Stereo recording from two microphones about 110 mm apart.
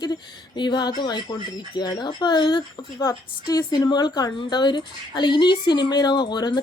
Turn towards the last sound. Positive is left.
turn(degrees=40)  # may be behind; listen again after turning